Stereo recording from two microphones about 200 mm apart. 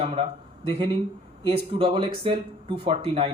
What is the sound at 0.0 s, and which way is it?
Speech, 30° right (ahead or behind).